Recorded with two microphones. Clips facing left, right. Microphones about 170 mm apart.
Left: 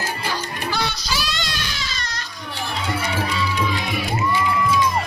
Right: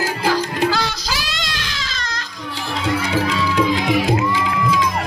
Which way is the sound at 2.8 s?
90° right.